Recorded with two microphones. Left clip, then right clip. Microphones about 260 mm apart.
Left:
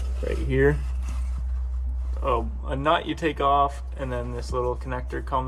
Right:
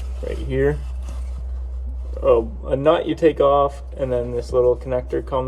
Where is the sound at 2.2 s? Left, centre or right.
Left.